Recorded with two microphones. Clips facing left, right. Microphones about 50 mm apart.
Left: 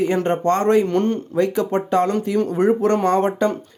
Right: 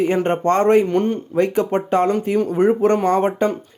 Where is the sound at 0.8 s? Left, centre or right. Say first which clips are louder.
Even; centre.